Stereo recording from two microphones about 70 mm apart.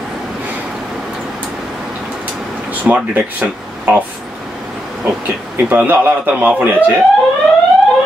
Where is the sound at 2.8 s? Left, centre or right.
Right.